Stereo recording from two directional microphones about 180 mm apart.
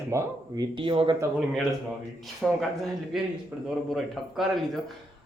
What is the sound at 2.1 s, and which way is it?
Speech, centre (ahead or behind).